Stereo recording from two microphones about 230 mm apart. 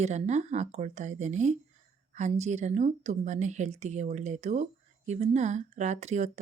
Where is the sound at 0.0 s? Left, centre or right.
Right.